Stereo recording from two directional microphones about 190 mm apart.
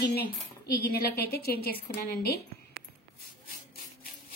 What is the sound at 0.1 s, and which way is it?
A woman's voice, 55° left (ahead or behind).